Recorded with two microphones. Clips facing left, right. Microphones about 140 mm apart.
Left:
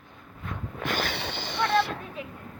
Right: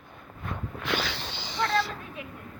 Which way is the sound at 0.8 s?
50° left (ahead or behind).